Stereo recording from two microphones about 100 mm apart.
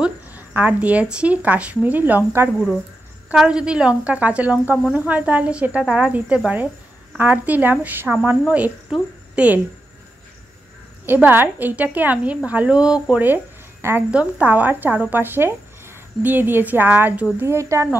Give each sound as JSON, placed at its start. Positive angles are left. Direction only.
{"t": 0.0, "sound": "speech", "side_deg": -15}
{"t": 3.3, "sound": "speech", "side_deg": -10}
{"t": 11.1, "sound": "speech", "side_deg": -20}
{"t": 17.5, "sound": "speech", "side_deg": -30}